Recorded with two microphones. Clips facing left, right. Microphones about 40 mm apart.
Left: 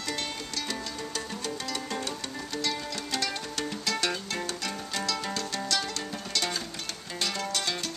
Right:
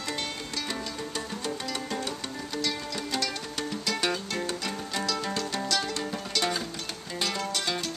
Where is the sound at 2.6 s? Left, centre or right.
Centre.